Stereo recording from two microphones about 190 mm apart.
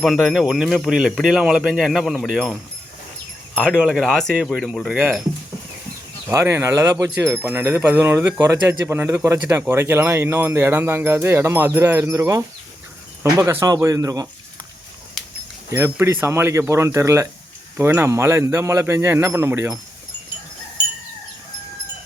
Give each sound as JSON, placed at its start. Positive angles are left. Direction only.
{"t": 0.0, "sound": "speech", "side_deg": 5}
{"t": 6.2, "sound": "speech", "side_deg": -15}
{"t": 15.7, "sound": "speech", "side_deg": -15}